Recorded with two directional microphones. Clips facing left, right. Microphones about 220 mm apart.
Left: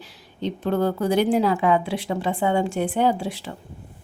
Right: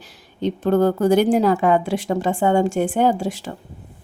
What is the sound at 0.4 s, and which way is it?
A woman's voice, 45° right (ahead or behind).